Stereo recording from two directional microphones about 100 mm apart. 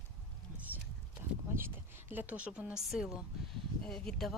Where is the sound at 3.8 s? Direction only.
5° left (ahead or behind).